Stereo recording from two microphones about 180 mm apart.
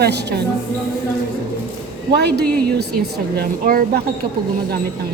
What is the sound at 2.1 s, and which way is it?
A woman's voice, 65° right (ahead or behind).